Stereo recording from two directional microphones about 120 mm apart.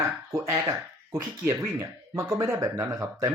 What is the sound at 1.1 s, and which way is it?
Speech, 25° right (ahead or behind).